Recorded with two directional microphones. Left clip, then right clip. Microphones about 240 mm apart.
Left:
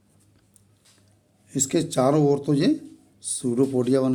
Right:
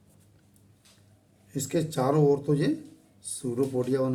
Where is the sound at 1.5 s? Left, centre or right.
Left.